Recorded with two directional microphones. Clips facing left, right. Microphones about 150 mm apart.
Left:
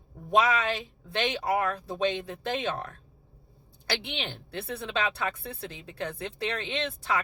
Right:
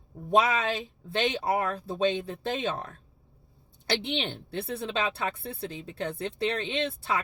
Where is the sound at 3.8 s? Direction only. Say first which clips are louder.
Right 4 dB; 30° right (ahead or behind).